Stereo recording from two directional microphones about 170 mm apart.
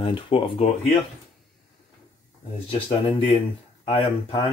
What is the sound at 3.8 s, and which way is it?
Speech, 35° left (ahead or behind).